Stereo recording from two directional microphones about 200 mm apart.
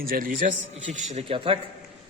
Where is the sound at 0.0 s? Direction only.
45° right (ahead or behind).